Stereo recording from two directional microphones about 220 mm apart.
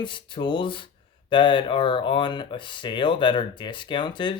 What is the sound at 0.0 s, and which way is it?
Speech, 20° left (ahead or behind).